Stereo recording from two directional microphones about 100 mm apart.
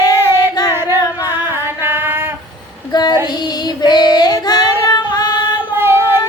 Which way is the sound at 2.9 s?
45° left (ahead or behind).